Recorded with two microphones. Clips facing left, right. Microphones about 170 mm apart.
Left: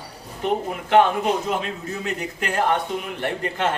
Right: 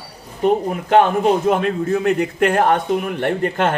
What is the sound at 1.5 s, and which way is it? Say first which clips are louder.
A man's voice: right 9 dB; 55° right (ahead or behind).